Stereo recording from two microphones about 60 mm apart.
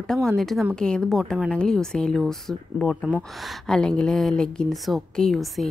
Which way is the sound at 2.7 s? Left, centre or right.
Centre.